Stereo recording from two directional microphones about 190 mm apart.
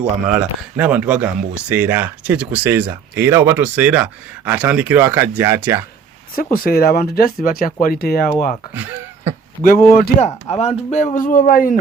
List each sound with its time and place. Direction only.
0.0 s speech: 5° right (ahead or behind)
6.3 s speech: 50° left (ahead or behind)
8.7 s throat clearing: 10° right (ahead or behind)
9.6 s speech: 50° left (ahead or behind)
10.6 s speech: 30° left (ahead or behind)